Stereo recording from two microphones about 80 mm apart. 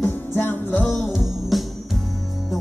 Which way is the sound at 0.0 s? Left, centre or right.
Left.